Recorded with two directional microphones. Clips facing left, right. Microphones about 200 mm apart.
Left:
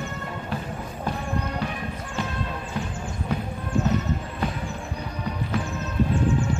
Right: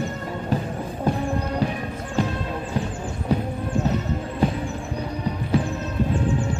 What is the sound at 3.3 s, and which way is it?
Music, 35° right (ahead or behind).